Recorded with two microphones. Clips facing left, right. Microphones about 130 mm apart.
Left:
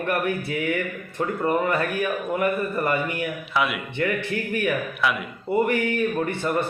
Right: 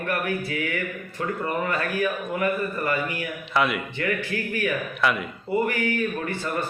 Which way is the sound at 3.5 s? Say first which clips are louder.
Right 2 dB; centre (ahead or behind).